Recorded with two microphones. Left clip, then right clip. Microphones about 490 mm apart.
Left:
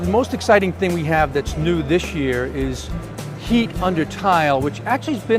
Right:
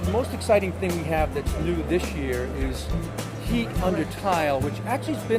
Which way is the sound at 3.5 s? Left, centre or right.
Left.